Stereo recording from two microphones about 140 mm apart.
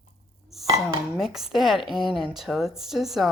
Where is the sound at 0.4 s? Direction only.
Centre (ahead or behind).